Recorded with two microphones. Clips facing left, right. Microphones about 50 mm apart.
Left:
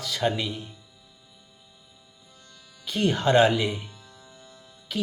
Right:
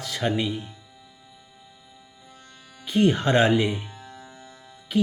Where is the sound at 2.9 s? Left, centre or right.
Centre.